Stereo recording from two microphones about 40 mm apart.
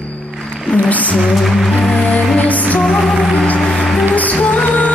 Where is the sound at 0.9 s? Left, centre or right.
Left.